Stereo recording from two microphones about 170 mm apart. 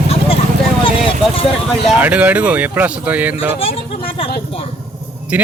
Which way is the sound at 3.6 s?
35° left (ahead or behind).